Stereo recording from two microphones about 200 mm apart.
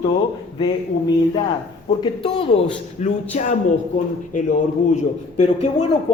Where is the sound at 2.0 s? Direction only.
25° left (ahead or behind).